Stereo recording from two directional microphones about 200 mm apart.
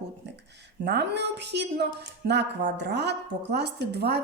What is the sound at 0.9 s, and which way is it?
A woman's voice, 60° right (ahead or behind).